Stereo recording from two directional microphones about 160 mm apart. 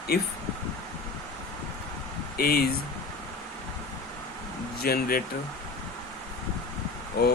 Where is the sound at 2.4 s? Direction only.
70° left (ahead or behind).